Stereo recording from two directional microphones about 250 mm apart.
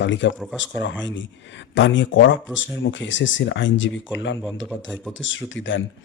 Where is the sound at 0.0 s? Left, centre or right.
Left.